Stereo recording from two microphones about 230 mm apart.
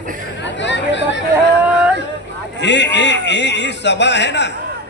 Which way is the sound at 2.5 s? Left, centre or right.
Left.